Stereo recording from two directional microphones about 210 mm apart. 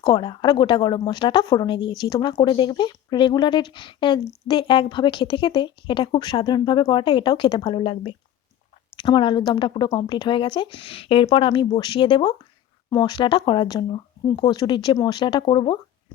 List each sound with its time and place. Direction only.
0.0 s speech: 20° left (ahead or behind)